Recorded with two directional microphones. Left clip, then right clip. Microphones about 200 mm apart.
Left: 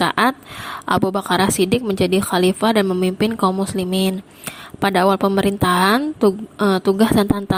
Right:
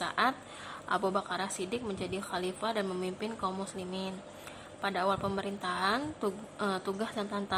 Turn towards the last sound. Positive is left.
turn(degrees=45)  # may be behind; listen again after turning